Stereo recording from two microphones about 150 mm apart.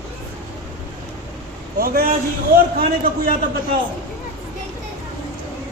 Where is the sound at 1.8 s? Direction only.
80° right.